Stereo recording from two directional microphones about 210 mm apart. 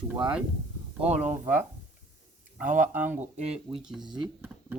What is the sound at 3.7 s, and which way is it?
Speech, centre (ahead or behind).